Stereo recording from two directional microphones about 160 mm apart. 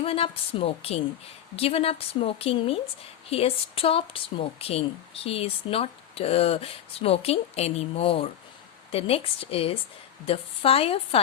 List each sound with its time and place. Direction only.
0.0 s speech: 35° left (ahead or behind)